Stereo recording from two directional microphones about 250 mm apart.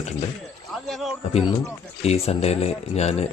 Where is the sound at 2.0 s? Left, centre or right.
Left.